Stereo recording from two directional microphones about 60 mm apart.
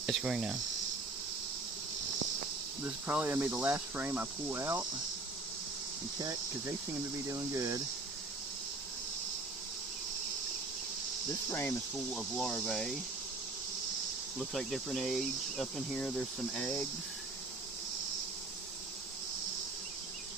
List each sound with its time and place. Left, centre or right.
0.0 s cricket: centre
2.8 s cricket: right
4.5 s cricket: right
7.3 s cricket: right
11.4 s cricket: left
11.9 s speech: centre
14.7 s speech: centre
16.0 s cricket: left